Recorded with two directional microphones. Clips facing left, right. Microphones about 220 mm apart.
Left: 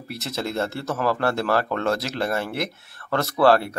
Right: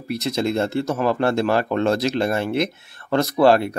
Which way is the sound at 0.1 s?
15° right (ahead or behind).